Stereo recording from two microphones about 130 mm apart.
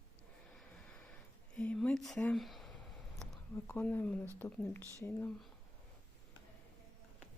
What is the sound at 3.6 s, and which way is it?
Speech, 15° left (ahead or behind).